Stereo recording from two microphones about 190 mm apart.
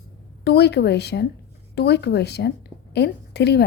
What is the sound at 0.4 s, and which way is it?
A woman's voice, 60° left (ahead or behind).